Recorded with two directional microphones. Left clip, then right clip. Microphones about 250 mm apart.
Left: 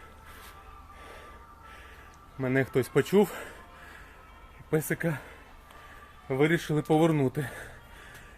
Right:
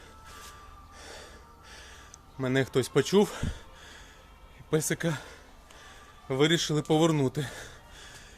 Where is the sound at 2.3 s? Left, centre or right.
Centre.